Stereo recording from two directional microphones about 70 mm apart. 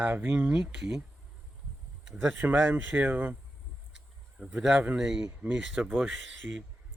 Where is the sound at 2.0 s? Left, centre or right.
Centre.